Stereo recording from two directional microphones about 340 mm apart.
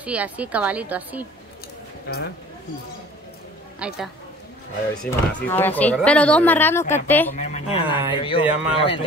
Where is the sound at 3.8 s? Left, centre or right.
Centre.